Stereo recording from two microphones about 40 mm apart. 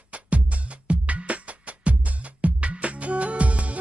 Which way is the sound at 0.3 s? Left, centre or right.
Right.